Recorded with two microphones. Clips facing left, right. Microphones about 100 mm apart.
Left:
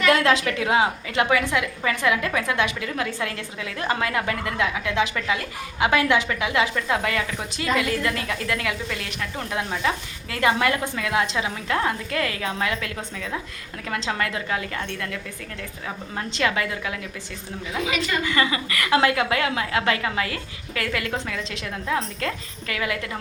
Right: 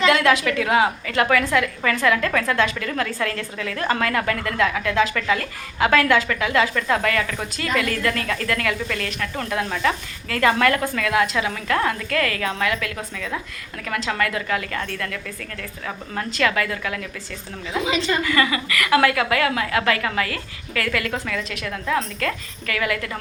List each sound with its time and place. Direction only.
0.1 s a woman's voice: 30° left (ahead or behind)
17.7 s a woman's voice: 25° right (ahead or behind)
18.2 s a woman's voice: 25° left (ahead or behind)